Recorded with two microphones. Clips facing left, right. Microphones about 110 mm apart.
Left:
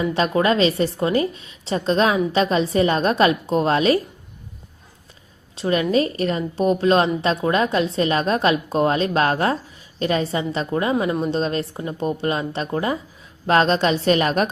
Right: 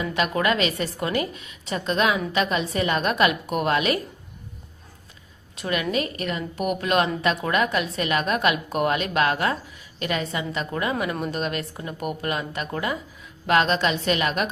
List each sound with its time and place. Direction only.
0.0 s a woman's voice: 30° left (ahead or behind)
5.5 s a woman's voice: 30° left (ahead or behind)